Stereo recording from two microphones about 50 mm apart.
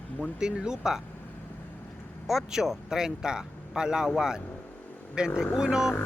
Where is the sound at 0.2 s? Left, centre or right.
Centre.